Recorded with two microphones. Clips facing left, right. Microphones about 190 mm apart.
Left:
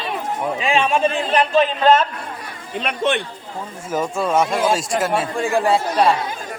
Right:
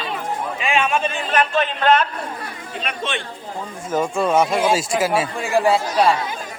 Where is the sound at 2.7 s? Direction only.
55° left (ahead or behind).